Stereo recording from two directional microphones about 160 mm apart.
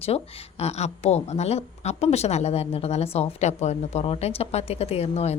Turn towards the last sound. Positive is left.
turn(degrees=40)  # may be behind; listen again after turning